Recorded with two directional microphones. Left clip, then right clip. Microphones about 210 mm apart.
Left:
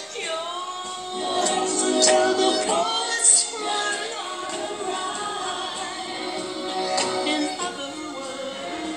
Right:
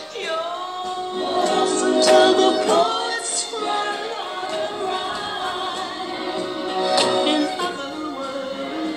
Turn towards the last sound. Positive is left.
turn(degrees=-15)  # may be behind; listen again after turning